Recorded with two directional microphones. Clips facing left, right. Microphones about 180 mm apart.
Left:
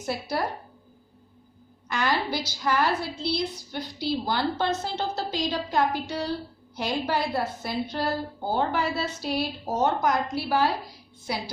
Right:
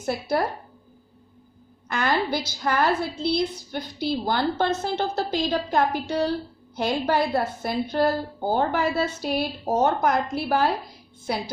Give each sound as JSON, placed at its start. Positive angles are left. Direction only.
{"t": 0.0, "sound": "a woman's voice", "side_deg": -50}
{"t": 1.9, "sound": "a woman's voice", "side_deg": -50}